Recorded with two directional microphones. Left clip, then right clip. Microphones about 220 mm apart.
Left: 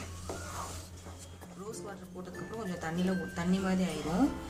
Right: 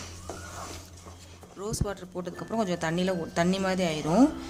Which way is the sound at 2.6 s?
45° right (ahead or behind).